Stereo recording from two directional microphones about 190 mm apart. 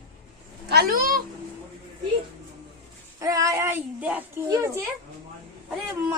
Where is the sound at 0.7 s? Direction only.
50° right (ahead or behind).